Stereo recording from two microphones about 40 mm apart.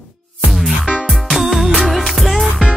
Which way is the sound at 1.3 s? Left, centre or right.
Centre.